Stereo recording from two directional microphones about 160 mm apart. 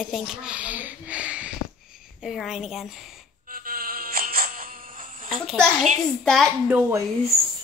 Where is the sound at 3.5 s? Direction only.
65° right (ahead or behind).